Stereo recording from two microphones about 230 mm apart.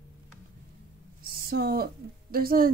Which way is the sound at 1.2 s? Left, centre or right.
Right.